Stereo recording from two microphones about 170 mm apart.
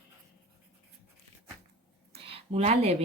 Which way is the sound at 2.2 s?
35° right (ahead or behind).